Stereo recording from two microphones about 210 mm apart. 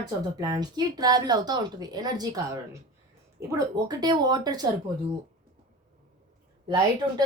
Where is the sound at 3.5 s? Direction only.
20° right (ahead or behind).